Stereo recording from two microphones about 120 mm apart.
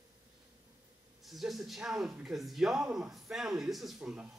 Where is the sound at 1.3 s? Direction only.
Centre (ahead or behind).